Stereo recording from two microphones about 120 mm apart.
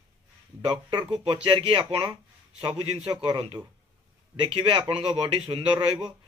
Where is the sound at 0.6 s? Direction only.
40° right (ahead or behind).